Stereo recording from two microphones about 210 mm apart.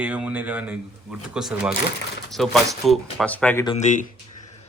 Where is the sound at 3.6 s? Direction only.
30° left (ahead or behind).